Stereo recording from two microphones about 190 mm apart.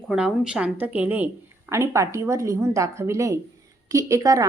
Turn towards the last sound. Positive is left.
turn(degrees=-15)  # may be behind; listen again after turning